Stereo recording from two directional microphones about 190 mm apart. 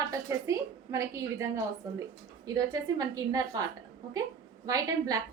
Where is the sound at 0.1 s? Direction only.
15° right (ahead or behind).